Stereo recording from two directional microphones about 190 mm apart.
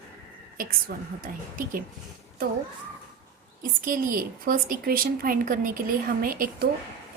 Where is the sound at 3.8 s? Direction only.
45° right (ahead or behind).